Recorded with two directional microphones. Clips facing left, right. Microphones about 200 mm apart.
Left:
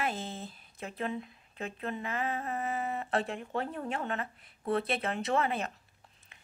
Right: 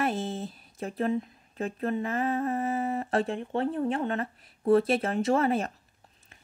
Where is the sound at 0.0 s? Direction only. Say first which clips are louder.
Right 6 dB; 40° right (ahead or behind).